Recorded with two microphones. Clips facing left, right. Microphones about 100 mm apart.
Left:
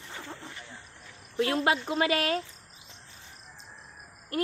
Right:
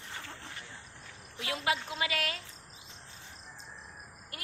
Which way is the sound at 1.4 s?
50° left (ahead or behind).